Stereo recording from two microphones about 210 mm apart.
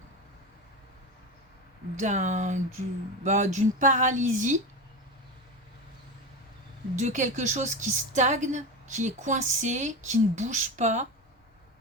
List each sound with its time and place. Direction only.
2.0 s a woman's voice: 35° right (ahead or behind)
6.9 s a woman's voice: 35° right (ahead or behind)